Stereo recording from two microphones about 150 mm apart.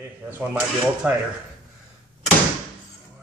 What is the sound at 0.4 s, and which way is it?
Speech, 10° right (ahead or behind).